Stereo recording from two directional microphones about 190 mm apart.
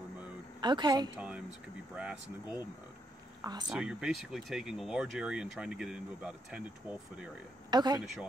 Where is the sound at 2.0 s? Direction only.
5° right (ahead or behind).